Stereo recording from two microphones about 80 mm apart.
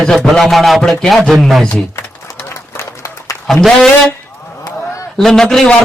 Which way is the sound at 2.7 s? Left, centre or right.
Left.